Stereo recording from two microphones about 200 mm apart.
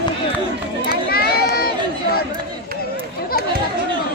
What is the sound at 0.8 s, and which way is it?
Run, 50° left (ahead or behind).